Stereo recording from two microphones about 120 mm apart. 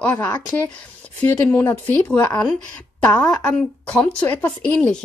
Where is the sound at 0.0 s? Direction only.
15° left (ahead or behind).